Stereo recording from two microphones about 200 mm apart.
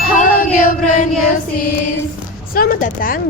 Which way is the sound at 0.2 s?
40° left (ahead or behind).